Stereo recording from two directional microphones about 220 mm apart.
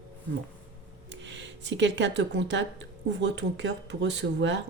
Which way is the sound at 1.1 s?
55° right (ahead or behind).